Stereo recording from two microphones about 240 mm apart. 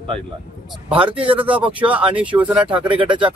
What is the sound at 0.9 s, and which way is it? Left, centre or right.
Speech, right.